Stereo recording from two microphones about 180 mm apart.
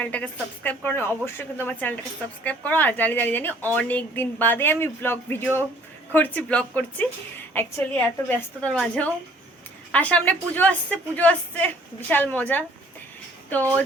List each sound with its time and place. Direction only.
0.0 s a woman's voice: 10° left (ahead or behind)